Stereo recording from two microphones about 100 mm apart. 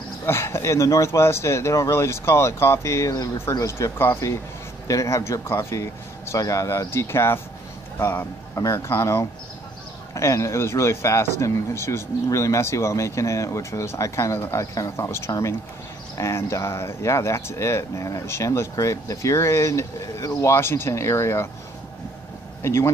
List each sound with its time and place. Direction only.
0.3 s speech: 25° left (ahead or behind)
22.6 s speech: 25° left (ahead or behind)